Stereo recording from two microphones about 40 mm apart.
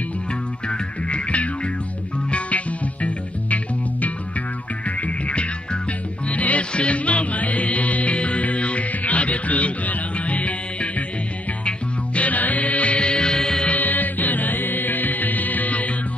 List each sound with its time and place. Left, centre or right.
0.7 s music: left
12.2 s music: left; by 13.7 s centre
13.7 s music: left